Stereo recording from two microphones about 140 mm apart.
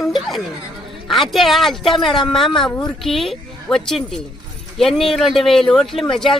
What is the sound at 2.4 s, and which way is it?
Speech, 5° left (ahead or behind).